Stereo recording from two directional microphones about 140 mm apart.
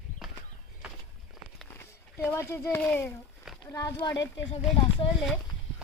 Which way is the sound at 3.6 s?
20° left (ahead or behind).